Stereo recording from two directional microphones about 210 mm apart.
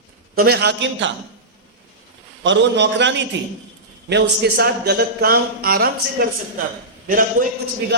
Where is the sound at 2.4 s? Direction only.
60° right (ahead or behind).